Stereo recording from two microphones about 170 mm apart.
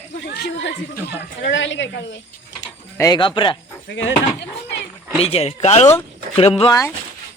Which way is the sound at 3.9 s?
90° left.